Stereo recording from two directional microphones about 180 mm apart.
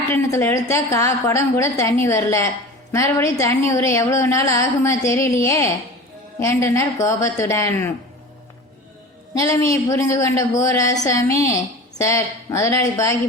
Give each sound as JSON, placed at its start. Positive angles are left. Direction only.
{"t": 0.3, "sound": "a woman's voice", "side_deg": 15}
{"t": 9.3, "sound": "a woman's voice", "side_deg": 15}